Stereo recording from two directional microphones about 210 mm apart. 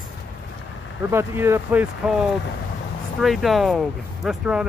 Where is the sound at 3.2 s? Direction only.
Centre (ahead or behind).